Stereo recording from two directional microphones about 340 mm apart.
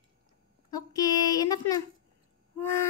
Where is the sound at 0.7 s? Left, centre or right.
Centre.